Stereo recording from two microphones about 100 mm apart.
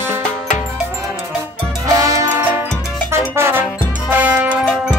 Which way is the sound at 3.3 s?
25° right (ahead or behind).